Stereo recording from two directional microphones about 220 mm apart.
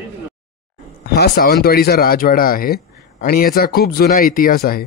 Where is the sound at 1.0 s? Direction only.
45° left (ahead or behind).